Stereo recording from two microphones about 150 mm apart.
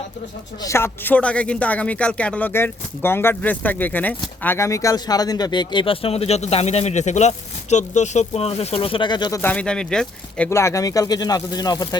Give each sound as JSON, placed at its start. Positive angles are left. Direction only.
{"t": 0.6, "sound": "speech", "side_deg": 20}
{"t": 9.4, "sound": "speech", "side_deg": 10}
{"t": 10.5, "sound": "speech", "side_deg": 20}